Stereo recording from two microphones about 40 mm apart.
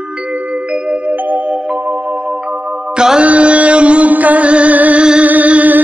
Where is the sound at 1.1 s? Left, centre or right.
Right.